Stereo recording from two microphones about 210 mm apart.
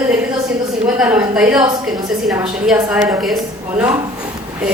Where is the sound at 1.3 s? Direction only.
5° right (ahead or behind).